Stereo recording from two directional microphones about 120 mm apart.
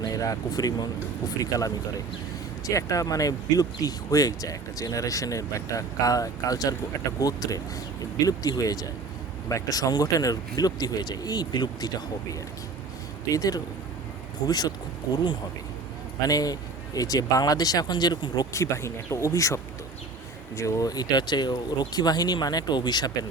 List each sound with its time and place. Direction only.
0.0 s speech: 30° left (ahead or behind)
20.6 s speech: 25° left (ahead or behind)